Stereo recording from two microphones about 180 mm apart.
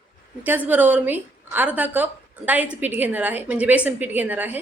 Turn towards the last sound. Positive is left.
turn(degrees=-10)  # may be behind; listen again after turning